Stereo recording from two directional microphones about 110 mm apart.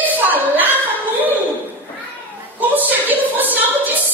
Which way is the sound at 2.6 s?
15° right (ahead or behind).